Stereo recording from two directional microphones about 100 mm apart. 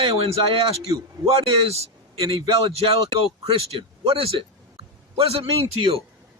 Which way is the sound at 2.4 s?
75° right (ahead or behind).